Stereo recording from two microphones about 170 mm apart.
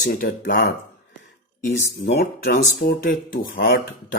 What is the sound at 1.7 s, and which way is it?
Speech, 65° left (ahead or behind).